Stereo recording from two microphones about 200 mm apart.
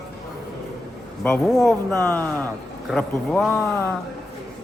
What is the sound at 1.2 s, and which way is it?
Speech, 10° left (ahead or behind).